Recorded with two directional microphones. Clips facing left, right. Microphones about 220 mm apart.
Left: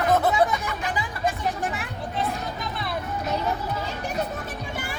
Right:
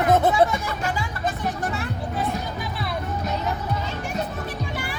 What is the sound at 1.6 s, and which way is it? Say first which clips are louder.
Music: right 2 dB; 15° left (ahead or behind).